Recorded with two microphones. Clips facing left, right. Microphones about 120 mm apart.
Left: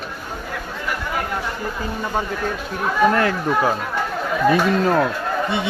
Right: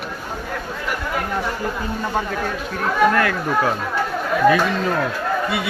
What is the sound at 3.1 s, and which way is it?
Speech, 25° left (ahead or behind).